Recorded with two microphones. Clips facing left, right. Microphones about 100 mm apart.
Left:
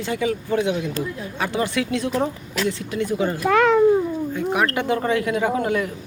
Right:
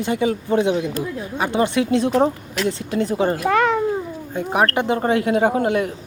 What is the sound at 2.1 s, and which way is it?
A man's voice, 30° right (ahead or behind).